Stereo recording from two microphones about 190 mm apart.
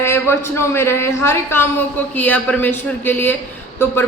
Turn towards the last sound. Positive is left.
turn(degrees=10)  # may be behind; listen again after turning